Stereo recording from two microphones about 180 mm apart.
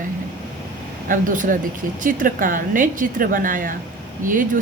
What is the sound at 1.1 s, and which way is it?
A woman's voice, 50° right (ahead or behind).